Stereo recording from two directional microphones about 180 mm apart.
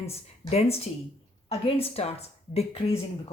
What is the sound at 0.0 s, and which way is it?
Speech, 35° left (ahead or behind).